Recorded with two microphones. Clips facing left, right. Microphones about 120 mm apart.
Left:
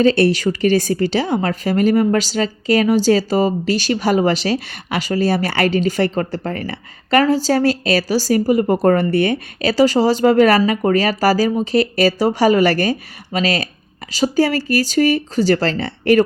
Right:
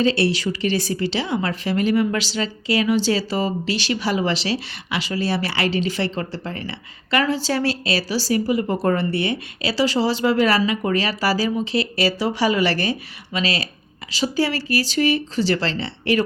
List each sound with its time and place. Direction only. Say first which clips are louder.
0.0 s a woman's voice: left 6 dB; 50° left (ahead or behind)